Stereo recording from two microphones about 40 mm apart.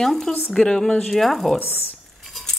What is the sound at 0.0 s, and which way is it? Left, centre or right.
Speech, centre.